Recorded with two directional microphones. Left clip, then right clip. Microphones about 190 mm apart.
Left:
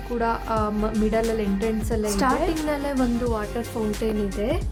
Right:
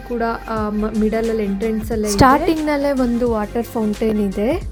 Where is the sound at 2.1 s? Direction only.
30° right (ahead or behind).